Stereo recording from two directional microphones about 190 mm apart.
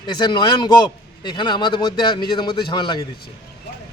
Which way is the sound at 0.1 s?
25° left (ahead or behind).